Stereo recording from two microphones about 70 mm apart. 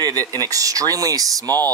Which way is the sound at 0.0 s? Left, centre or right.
Right.